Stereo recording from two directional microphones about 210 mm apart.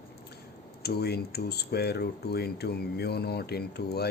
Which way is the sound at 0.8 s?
50° left (ahead or behind).